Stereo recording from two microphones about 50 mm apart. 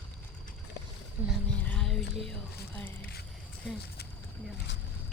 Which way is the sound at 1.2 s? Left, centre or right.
Right.